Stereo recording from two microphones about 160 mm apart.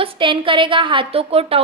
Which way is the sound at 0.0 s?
30° right (ahead or behind).